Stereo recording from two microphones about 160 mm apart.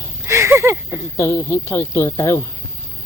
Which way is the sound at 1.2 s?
15° left (ahead or behind).